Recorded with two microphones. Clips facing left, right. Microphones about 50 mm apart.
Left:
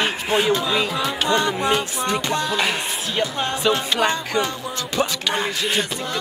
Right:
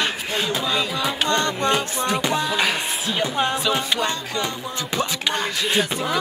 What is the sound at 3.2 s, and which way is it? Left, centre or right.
Speech, centre.